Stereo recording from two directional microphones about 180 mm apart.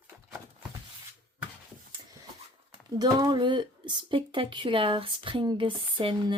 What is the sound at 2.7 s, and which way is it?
Speech, 20° right (ahead or behind).